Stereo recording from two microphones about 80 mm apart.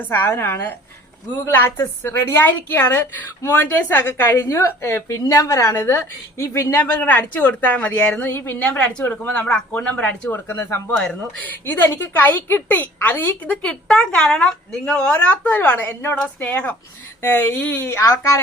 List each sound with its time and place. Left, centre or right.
0.1 s a woman's voice: left
4.4 s a woman's voice: left
5.3 s a woman's voice: left
5.7 s a woman's voice: left; by 8.3 s centre
8.3 s a woman's voice: left
9.5 s a woman's voice: centre
10.5 s a woman's voice: left
10.9 s a woman's voice: centre
11.4 s a woman's voice: left
13.6 s a woman's voice: centre; by 18.0 s left